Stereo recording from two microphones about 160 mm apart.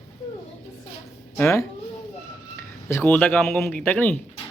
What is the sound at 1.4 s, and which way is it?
Speech, 15° left (ahead or behind).